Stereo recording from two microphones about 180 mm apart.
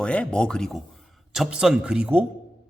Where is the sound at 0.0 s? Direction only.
5° left (ahead or behind).